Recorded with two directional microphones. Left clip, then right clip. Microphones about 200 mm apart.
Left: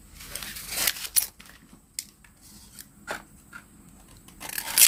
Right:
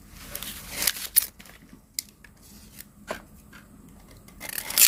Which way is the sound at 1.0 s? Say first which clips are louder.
Even; 20° right (ahead or behind).